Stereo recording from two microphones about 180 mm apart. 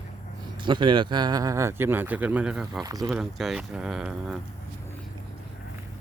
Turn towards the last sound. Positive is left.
turn(degrees=-5)  # may be behind; listen again after turning